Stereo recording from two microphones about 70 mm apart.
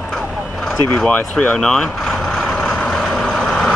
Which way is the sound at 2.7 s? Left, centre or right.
Centre.